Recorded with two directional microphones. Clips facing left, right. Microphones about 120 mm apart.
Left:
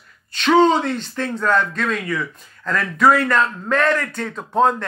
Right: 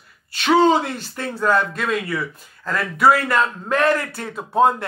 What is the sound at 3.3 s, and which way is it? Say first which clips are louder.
Speech: left 1 dB; 20° right (ahead or behind).